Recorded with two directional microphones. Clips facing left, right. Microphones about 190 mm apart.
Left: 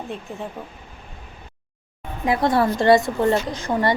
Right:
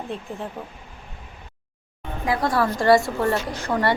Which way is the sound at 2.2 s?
25° left (ahead or behind).